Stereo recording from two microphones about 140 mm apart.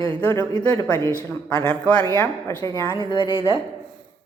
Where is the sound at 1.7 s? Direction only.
10° left (ahead or behind).